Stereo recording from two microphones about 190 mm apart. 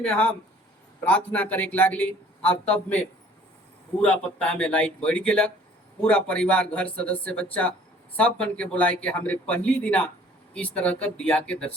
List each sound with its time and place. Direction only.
0.0 s speech: 5° left (ahead or behind)
4.0 s speech: 5° left (ahead or behind)